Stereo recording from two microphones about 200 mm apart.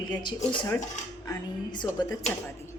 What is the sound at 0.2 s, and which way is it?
Speech, 20° left (ahead or behind).